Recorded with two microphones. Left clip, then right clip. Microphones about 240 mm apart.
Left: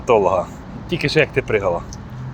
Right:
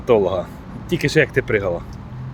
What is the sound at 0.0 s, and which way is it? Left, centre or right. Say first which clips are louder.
Speech: left 2 dB; right.